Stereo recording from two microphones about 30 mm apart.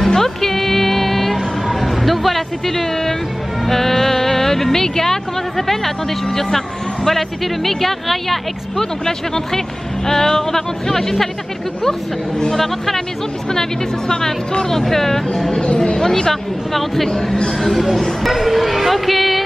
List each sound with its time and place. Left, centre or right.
0.1 s music: centre
1.7 s speech: centre
9.0 s speech: centre
12.5 s speech: centre
15.6 s speech: left
16.0 s speech: centre
16.7 s speech: centre